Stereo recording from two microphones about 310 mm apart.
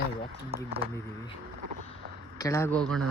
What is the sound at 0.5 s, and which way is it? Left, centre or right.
Speech, centre.